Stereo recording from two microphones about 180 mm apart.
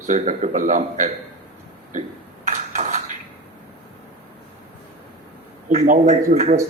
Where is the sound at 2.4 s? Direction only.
40° right (ahead or behind).